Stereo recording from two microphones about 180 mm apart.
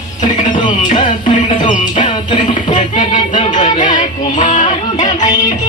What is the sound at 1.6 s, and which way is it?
Music, 45° left (ahead or behind).